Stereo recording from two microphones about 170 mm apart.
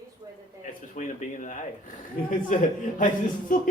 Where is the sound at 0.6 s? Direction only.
50° left (ahead or behind).